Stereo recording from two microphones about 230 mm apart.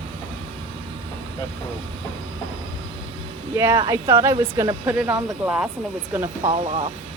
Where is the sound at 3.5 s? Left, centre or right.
Centre.